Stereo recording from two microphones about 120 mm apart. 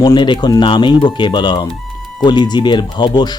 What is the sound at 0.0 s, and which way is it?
Speech, 35° left (ahead or behind).